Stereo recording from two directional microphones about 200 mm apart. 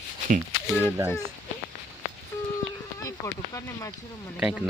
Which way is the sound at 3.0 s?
15° left (ahead or behind).